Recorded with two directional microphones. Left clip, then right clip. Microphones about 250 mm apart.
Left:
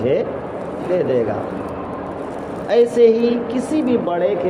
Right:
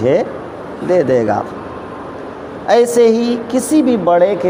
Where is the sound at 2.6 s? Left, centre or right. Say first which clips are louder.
Right 3 dB; right.